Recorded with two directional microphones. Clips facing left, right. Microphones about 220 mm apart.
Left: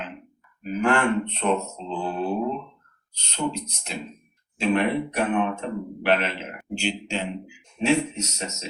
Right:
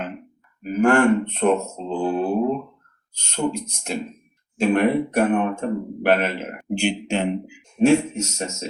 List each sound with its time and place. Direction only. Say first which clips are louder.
0.6 s a man's voice: right 6 dB; 50° right (ahead or behind)